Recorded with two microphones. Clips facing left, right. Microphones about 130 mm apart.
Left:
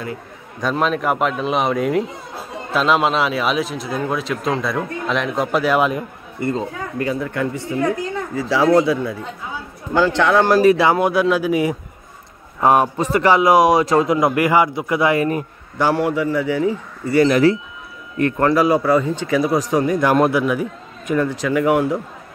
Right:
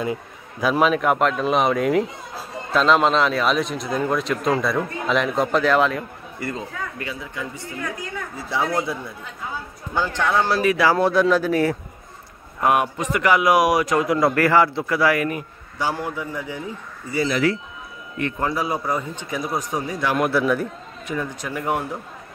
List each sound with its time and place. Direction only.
0.6 s speech: 5° right (ahead or behind); by 6.5 s 15° left (ahead or behind)
6.5 s speech: 35° left (ahead or behind)
7.2 s a man's voice: 60° left (ahead or behind)
8.4 s a man's voice: 90° left
10.5 s speech: 40° left (ahead or behind)
10.8 s a man's voice: 15° left (ahead or behind)
12.5 s a man's voice: 35° left (ahead or behind)
15.8 s a man's voice: 75° left (ahead or behind)
18.4 s a man's voice: 80° left
19.9 s a man's voice: 50° left (ahead or behind)
21.1 s a man's voice: 75° left (ahead or behind); by 21.9 s 90° left